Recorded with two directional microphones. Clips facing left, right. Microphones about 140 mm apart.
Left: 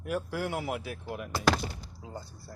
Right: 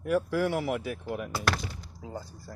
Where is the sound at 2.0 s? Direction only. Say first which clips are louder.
Right 4 dB; 90° right.